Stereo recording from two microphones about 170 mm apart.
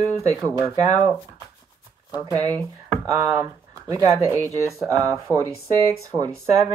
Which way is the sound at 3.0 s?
20° right (ahead or behind).